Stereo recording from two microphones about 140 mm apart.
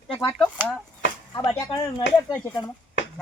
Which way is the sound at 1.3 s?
30° left (ahead or behind).